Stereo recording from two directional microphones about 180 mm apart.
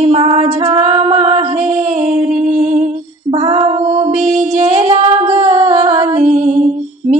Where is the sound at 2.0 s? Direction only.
45° right (ahead or behind).